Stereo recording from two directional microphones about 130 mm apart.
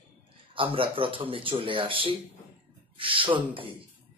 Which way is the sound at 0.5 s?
40° right (ahead or behind).